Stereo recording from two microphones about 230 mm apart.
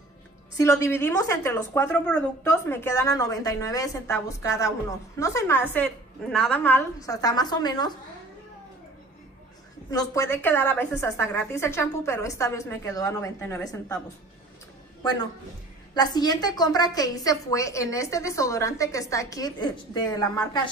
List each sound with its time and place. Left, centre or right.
0.6 s a woman's voice: centre
9.8 s a woman's voice: centre
15.9 s a woman's voice: centre